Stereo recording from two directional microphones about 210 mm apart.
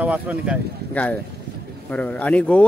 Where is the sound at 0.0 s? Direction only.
5° right (ahead or behind).